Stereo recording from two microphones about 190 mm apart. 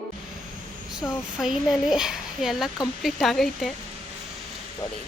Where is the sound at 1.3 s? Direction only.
Centre (ahead or behind).